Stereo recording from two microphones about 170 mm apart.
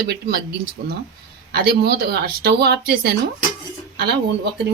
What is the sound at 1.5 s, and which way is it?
Speech, 65° right (ahead or behind).